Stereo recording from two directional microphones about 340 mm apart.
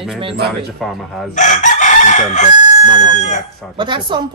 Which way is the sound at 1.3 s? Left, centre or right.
Left.